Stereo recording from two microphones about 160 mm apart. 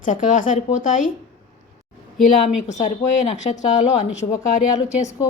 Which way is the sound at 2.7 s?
45° left (ahead or behind).